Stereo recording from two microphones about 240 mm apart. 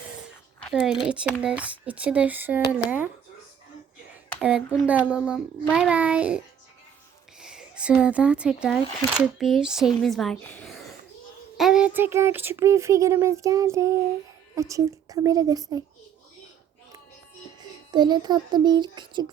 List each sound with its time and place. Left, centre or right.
0.7 s a child's voice: centre
4.4 s a child's voice: centre
17.9 s a child's voice: centre